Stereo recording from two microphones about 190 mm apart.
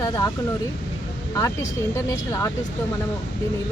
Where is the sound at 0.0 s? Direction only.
20° left (ahead or behind).